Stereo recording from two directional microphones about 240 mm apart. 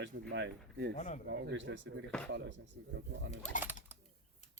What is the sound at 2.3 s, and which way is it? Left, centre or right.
Speech, right.